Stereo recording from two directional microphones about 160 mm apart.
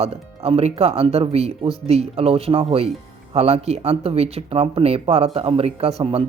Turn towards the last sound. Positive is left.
turn(degrees=-40)  # may be behind; listen again after turning